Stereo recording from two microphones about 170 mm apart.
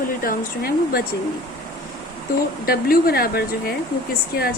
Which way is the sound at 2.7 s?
60° left (ahead or behind).